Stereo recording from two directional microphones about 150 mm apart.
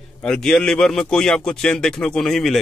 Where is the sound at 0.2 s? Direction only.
5° left (ahead or behind).